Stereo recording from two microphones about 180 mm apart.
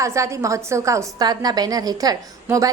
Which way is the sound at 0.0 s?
15° right (ahead or behind).